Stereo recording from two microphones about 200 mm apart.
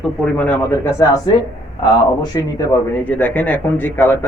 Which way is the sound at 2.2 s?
20° left (ahead or behind).